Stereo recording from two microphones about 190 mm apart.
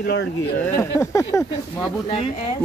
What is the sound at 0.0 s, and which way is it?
Speech, 60° left (ahead or behind).